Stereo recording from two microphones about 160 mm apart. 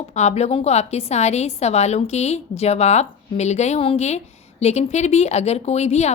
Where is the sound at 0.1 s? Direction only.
45° left (ahead or behind).